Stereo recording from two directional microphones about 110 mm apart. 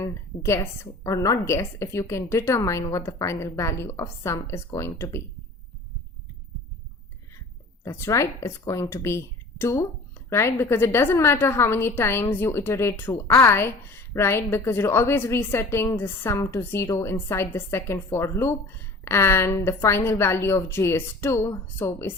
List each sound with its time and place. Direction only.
0.0 s a woman's voice: 25° left (ahead or behind)
7.9 s a woman's voice: 25° left (ahead or behind)